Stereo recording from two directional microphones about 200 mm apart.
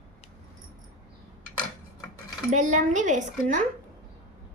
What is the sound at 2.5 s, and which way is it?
A woman's voice, 40° right (ahead or behind).